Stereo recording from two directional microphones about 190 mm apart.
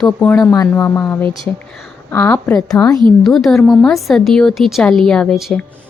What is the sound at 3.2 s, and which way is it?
A woman's voice, centre (ahead or behind).